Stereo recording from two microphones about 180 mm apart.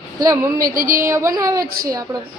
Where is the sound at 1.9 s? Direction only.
20° right (ahead or behind).